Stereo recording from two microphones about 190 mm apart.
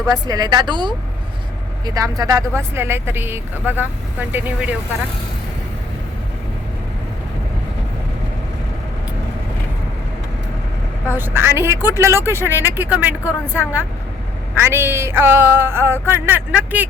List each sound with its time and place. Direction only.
0.1 s a woman's voice: 20° right (ahead or behind)
11.1 s speech: 10° right (ahead or behind)